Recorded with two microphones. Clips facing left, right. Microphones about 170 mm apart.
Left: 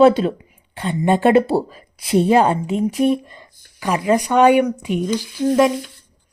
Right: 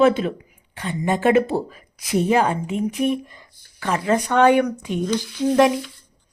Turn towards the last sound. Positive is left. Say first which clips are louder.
# left 1 dB
turn(degrees=0)  # may be behind; listen again after turning